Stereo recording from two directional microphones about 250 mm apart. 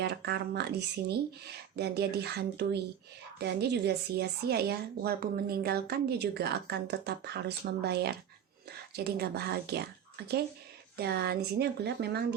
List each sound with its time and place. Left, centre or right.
0.0 s speech: right
10.9 s speech: right